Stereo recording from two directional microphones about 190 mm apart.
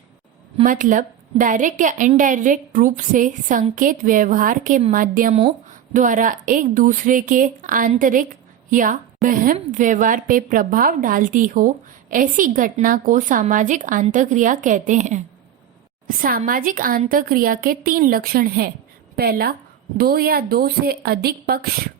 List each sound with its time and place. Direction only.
0.6 s a woman's voice: 45° right (ahead or behind)